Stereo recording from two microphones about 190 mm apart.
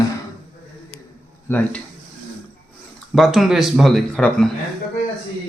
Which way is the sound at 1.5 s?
10° left (ahead or behind).